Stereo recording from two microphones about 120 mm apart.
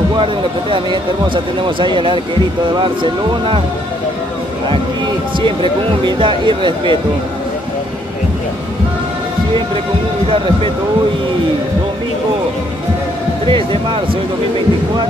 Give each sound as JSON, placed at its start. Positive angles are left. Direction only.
{"t": 0.2, "sound": "speech", "side_deg": -45}
{"t": 5.4, "sound": "speech", "side_deg": -45}
{"t": 13.5, "sound": "speech", "side_deg": -45}